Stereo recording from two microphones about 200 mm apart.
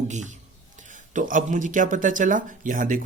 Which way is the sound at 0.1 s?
35° right (ahead or behind).